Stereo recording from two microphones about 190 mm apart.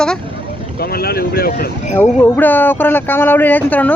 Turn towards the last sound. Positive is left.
turn(degrees=10)  # may be behind; listen again after turning